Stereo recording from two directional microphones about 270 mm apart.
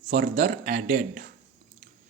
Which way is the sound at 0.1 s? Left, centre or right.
Right.